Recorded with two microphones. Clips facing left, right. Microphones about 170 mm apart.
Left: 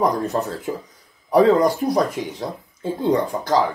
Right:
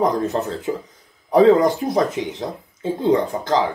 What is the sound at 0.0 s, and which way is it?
Speech, 20° right (ahead or behind).